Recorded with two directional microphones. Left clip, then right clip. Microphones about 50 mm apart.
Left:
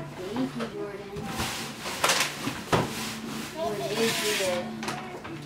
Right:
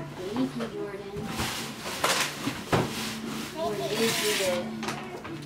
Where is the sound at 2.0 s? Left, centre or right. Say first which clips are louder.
Left 2 dB; left.